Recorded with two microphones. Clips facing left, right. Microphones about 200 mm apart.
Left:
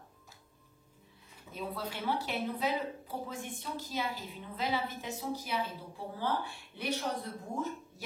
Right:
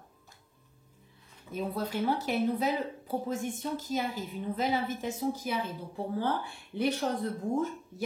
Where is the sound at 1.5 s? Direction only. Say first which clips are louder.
Right 7 dB; 45° right (ahead or behind).